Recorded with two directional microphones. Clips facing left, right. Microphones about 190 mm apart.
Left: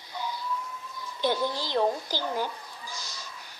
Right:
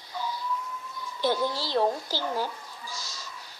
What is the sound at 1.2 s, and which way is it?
A woman's voice, 20° left (ahead or behind).